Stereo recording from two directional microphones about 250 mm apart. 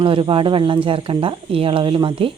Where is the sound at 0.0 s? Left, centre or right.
Right.